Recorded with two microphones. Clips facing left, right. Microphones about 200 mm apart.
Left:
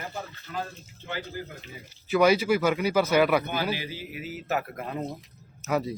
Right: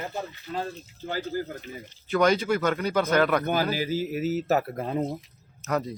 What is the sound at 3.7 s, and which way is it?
Speech, 45° right (ahead or behind).